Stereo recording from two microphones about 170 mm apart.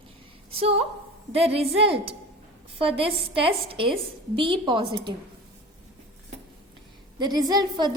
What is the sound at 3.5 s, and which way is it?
A woman's voice, 35° right (ahead or behind).